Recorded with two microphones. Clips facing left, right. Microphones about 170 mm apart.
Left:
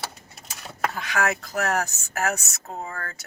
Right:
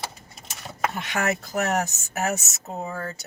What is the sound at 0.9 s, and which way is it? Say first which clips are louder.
Speech: left 2 dB; 25° right (ahead or behind).